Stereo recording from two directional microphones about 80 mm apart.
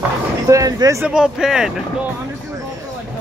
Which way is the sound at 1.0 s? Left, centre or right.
Centre.